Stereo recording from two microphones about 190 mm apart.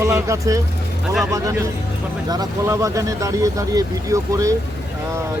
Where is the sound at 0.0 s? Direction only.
15° right (ahead or behind).